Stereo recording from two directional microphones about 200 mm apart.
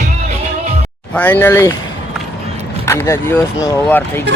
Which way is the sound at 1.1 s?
10° left (ahead or behind).